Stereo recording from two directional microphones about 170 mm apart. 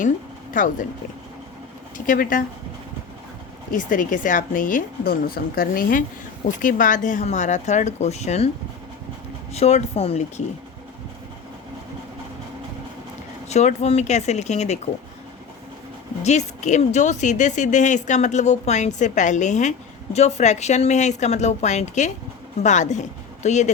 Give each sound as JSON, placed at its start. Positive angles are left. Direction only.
{"t": 0.5, "sound": "a woman's voice", "side_deg": 50}
{"t": 2.0, "sound": "speech", "side_deg": 55}
{"t": 3.7, "sound": "a woman's voice", "side_deg": 50}
{"t": 9.5, "sound": "speech", "side_deg": 40}
{"t": 13.5, "sound": "speech", "side_deg": 40}
{"t": 16.2, "sound": "a woman's voice", "side_deg": 40}